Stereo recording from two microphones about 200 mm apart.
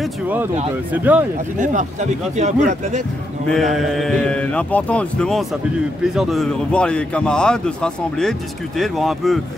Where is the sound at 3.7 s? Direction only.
Centre (ahead or behind).